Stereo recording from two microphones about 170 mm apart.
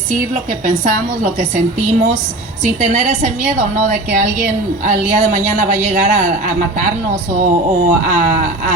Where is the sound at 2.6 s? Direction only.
45° right (ahead or behind).